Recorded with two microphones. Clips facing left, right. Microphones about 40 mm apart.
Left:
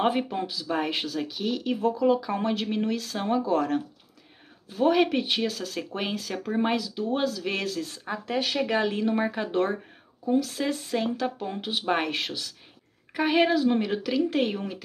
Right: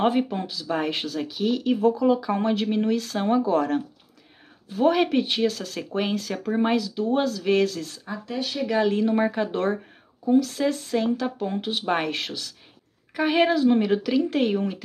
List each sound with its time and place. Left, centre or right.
0.0 s speech: centre
7.9 s speech: left
8.8 s speech: centre